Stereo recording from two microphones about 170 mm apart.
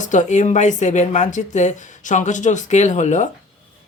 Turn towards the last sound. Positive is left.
turn(degrees=45)  # may be behind; listen again after turning